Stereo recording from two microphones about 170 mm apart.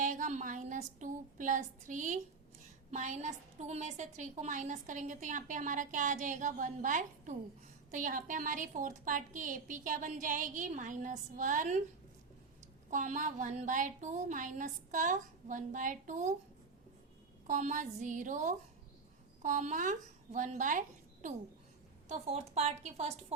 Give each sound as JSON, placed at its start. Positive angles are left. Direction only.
{"t": 0.0, "sound": "a sound", "side_deg": -50}
{"t": 0.9, "sound": "a woman's voice", "side_deg": -50}
{"t": 12.9, "sound": "a woman's voice", "side_deg": -50}
{"t": 17.4, "sound": "a woman's voice", "side_deg": -50}